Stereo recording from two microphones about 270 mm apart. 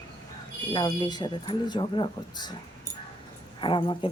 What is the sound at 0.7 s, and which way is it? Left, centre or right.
Speech, centre.